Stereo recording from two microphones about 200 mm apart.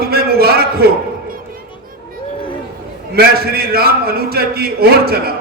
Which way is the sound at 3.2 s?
50° right (ahead or behind).